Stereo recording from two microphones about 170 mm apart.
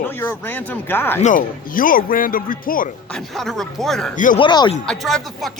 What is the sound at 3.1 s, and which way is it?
Speech, centre (ahead or behind).